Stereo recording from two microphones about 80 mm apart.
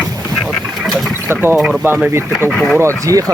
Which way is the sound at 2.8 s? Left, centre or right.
Right.